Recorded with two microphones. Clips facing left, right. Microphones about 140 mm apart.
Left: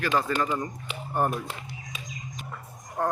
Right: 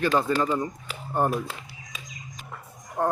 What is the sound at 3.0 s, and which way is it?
Speech, 15° right (ahead or behind).